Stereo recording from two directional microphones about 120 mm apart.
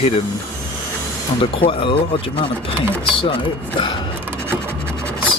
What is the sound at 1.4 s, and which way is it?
Speech, 45° left (ahead or behind).